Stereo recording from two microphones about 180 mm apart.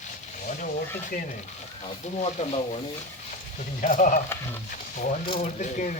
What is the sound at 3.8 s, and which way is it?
Speech, 50° left (ahead or behind).